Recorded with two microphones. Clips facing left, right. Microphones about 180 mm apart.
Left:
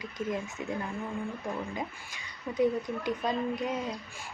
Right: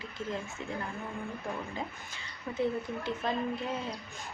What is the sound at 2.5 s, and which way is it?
Speech, 15° left (ahead or behind).